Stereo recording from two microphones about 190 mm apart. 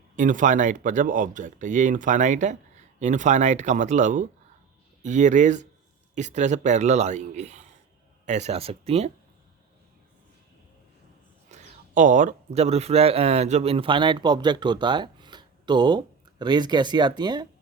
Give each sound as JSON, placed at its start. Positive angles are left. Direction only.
{"t": 0.2, "sound": "speech", "side_deg": -40}
{"t": 11.5, "sound": "speech", "side_deg": -40}